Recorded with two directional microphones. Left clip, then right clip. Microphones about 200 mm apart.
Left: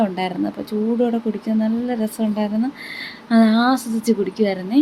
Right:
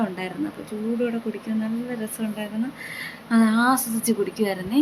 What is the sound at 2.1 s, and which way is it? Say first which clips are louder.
A woman's voice: left 7 dB; 20° left (ahead or behind).